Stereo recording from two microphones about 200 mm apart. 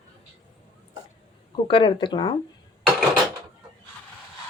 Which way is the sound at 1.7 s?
25° left (ahead or behind).